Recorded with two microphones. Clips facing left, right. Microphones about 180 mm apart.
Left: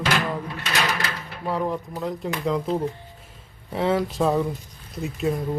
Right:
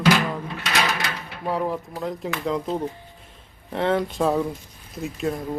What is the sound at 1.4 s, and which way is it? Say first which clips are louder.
Speech: even; 5° right (ahead or behind).